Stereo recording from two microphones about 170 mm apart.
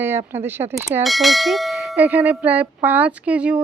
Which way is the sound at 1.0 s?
Centre (ahead or behind).